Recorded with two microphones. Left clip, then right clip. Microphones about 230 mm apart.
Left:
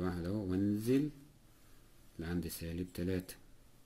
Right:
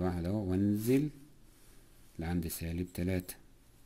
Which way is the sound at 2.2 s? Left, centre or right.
Right.